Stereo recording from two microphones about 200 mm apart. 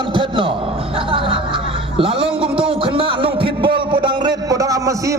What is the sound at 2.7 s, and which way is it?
A man's voice, 25° right (ahead or behind).